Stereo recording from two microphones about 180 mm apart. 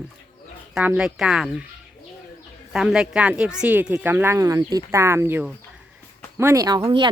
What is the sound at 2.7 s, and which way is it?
Speech, 5° right (ahead or behind).